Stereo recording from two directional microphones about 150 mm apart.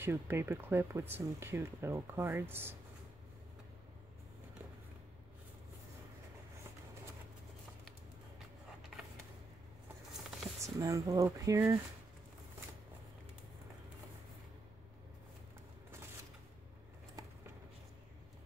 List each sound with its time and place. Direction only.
0.0 s speech: 15° right (ahead or behind)
10.6 s speech: 20° right (ahead or behind)